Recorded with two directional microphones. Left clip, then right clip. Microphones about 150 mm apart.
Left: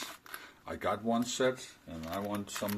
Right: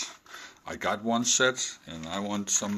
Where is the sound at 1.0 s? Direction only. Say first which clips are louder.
Right 8 dB; 45° right (ahead or behind).